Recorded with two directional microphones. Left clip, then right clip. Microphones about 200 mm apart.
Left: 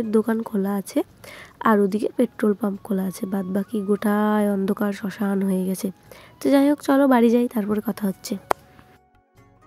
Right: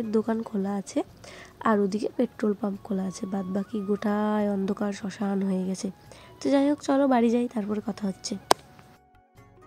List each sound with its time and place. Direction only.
0.1 s a woman's voice: 25° left (ahead or behind)